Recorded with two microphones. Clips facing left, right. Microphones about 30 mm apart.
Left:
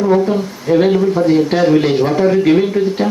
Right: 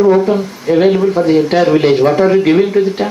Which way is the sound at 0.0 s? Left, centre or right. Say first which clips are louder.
Right 3 dB; centre.